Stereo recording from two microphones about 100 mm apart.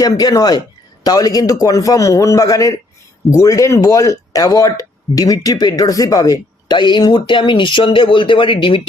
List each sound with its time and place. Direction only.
0.0 s speech: 40° left (ahead or behind); by 8.8 s 55° left (ahead or behind)